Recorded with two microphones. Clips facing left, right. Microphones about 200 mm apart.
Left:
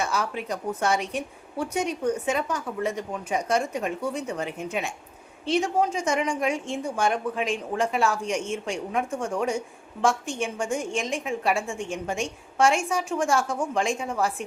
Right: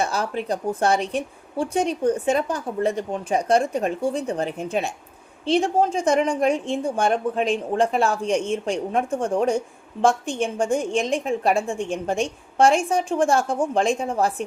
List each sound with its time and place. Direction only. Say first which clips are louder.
0.0 s a woman's voice: right 3 dB; 35° right (ahead or behind)